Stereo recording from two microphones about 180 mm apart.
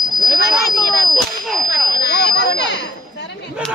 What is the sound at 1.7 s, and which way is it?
Tuning fork, 60° left (ahead or behind).